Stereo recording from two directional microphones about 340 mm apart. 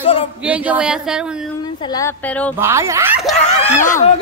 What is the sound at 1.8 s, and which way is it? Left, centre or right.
Speech, centre.